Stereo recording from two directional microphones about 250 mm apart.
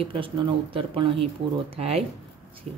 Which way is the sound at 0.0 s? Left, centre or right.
Right.